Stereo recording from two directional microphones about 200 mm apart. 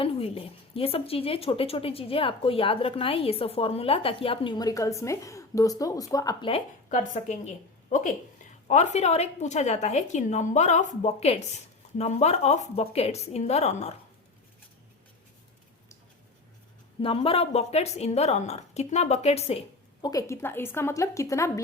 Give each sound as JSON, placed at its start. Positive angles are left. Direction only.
{"t": 0.0, "sound": "a woman's voice", "side_deg": 30}
{"t": 6.5, "sound": "a woman's voice", "side_deg": 35}
{"t": 17.0, "sound": "a woman's voice", "side_deg": 25}
{"t": 20.1, "sound": "a woman's voice", "side_deg": 15}